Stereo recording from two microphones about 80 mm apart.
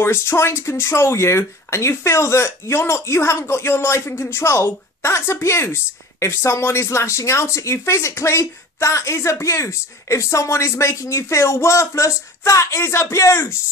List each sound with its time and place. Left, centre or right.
0.0 s speech: left